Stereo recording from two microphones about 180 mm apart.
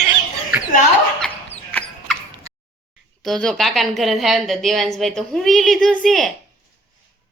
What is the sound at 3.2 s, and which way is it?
A woman's voice, 5° left (ahead or behind).